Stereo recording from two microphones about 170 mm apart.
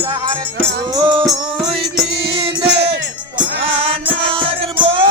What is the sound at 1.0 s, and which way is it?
Music, 25° right (ahead or behind).